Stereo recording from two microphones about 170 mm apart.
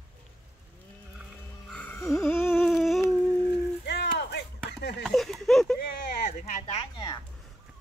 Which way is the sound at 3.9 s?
75° left (ahead or behind).